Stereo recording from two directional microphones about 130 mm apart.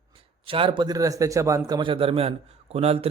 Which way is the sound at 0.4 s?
45° right (ahead or behind).